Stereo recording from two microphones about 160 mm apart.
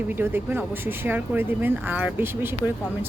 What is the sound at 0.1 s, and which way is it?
Speech, 15° right (ahead or behind).